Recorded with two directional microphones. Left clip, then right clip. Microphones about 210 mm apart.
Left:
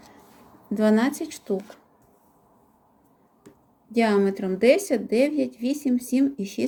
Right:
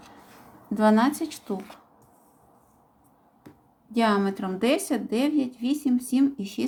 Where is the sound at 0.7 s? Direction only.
15° left (ahead or behind).